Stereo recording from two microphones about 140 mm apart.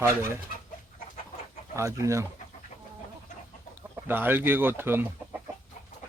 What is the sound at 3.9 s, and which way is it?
Speech, 15° right (ahead or behind).